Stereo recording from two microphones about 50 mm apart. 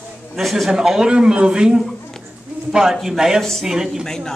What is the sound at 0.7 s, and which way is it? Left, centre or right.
Speech, centre.